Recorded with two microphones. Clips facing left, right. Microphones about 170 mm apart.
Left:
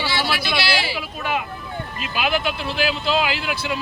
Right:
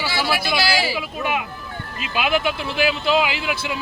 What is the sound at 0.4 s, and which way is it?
Speech, 40° right (ahead or behind).